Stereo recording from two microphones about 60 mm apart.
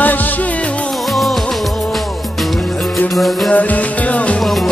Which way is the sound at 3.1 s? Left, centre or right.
Centre.